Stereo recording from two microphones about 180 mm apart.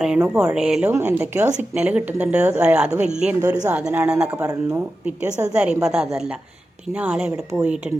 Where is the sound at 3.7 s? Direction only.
5° right (ahead or behind).